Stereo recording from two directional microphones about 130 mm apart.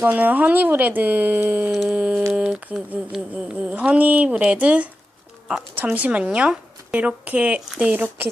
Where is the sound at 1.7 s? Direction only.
5° right (ahead or behind).